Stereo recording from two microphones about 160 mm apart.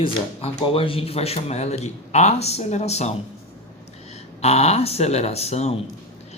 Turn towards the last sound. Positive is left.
turn(degrees=40)  # may be behind; listen again after turning